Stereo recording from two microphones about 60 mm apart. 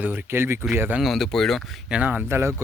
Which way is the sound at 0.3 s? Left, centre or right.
Right.